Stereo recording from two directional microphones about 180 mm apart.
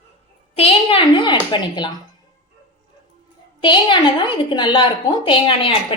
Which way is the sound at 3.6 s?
25° left (ahead or behind).